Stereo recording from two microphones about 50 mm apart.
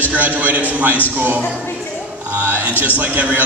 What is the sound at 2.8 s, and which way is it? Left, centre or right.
Speech, right.